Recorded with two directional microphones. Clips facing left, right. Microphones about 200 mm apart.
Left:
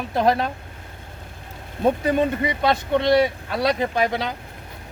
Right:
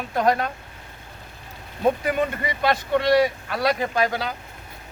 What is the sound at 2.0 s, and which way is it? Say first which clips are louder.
Speech: left 4 dB; 25° left (ahead or behind).